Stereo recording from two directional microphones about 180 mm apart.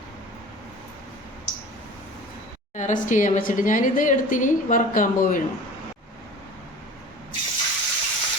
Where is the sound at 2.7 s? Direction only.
45° left (ahead or behind).